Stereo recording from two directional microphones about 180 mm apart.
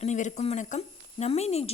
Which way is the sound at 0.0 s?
40° left (ahead or behind).